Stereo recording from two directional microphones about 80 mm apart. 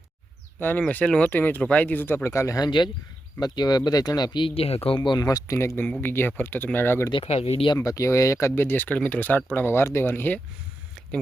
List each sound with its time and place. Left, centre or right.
0.6 s speech: left
2.6 s speech: left
5.2 s speech: left
7.1 s speech: left
7.9 s speech: left